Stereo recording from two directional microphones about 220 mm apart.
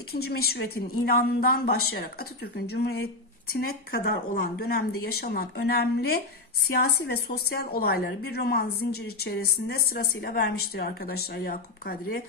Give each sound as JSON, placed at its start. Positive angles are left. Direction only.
{"t": 0.1, "sound": "a woman's voice", "side_deg": 45}